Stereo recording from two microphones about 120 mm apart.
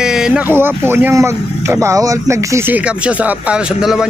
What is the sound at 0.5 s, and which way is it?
Speech, 20° right (ahead or behind).